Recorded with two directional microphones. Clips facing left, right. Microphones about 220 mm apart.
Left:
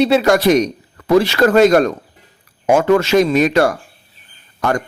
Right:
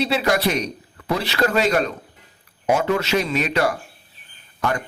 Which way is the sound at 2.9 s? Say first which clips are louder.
Left 9 dB; 45° left (ahead or behind).